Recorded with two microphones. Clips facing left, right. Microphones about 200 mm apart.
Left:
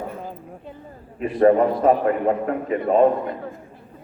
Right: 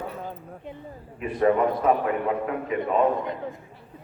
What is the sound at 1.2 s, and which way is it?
A man's voice, 40° left (ahead or behind).